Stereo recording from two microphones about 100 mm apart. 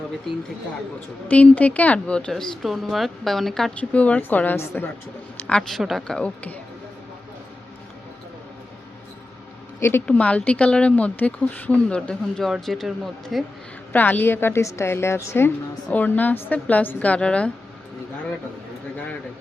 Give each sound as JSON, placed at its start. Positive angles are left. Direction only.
{"t": 1.3, "sound": "a woman's voice", "side_deg": 15}
{"t": 5.4, "sound": "a woman's voice", "side_deg": 10}
{"t": 10.1, "sound": "a woman's voice", "side_deg": 10}
{"t": 13.9, "sound": "a woman's voice", "side_deg": 20}